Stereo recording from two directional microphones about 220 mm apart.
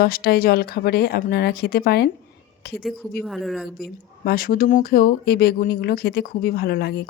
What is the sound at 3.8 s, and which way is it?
Speech, 40° left (ahead or behind).